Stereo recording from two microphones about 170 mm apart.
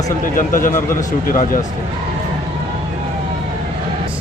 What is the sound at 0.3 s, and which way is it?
Speech, 50° left (ahead or behind).